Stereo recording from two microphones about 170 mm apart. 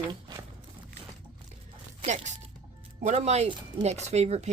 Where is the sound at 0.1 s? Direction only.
25° right (ahead or behind).